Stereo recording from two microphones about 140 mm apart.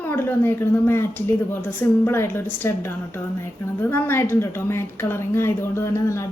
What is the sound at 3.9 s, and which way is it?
A woman's voice, 15° left (ahead or behind).